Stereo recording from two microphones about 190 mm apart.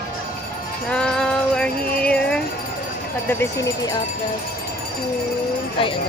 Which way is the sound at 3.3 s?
15° left (ahead or behind).